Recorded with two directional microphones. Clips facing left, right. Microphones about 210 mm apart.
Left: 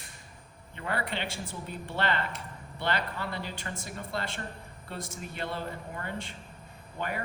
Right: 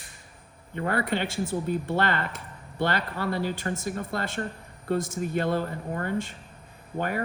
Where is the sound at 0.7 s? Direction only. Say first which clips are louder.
Right 7 dB; 45° right (ahead or behind).